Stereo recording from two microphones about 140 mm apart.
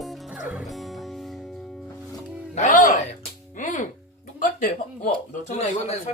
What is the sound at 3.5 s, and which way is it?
Music, 65° left (ahead or behind).